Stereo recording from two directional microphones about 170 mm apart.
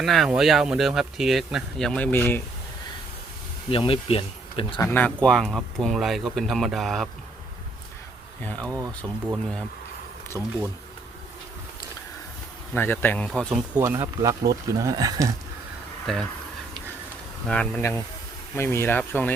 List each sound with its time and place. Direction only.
0.0 s speech: centre (ahead or behind)
3.7 s speech: 30° left (ahead or behind)
4.8 s speech: 15° left (ahead or behind)
8.4 s speech: 10° left (ahead or behind)
10.3 s speech: 20° right (ahead or behind)
12.7 s speech: 10° left (ahead or behind)
13.7 s speech: 15° right (ahead or behind)
16.1 s speech: centre (ahead or behind)
17.5 s speech: 5° left (ahead or behind)